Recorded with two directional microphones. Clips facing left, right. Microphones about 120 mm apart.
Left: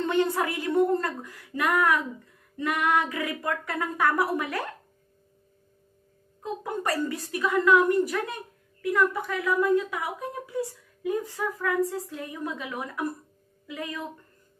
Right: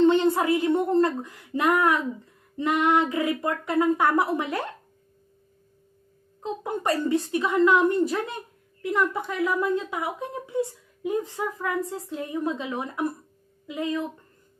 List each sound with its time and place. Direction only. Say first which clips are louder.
0.0 s a sound: right 5 dB; 25° right (ahead or behind)
2.5 s a woman's voice: right 3 dB; 25° right (ahead or behind)
6.4 s a woman's voice: right 3 dB; 25° right (ahead or behind)